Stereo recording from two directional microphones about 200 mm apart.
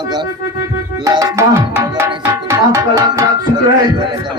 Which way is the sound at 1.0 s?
20° right (ahead or behind).